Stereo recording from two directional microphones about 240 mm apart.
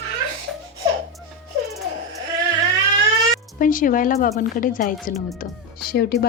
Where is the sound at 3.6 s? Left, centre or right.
Left.